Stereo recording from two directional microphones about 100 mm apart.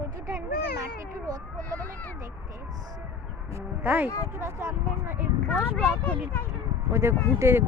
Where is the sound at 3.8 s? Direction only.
15° right (ahead or behind).